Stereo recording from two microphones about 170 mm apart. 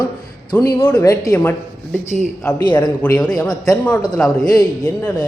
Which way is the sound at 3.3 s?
20° left (ahead or behind).